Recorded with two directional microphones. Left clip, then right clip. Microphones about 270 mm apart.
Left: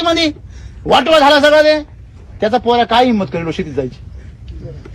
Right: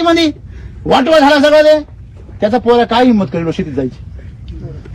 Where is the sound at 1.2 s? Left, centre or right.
Centre.